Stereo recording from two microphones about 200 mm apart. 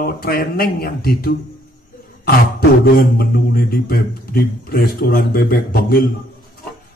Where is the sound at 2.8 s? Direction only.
50° left (ahead or behind).